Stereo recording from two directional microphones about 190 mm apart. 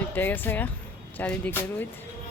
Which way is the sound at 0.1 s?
10° left (ahead or behind).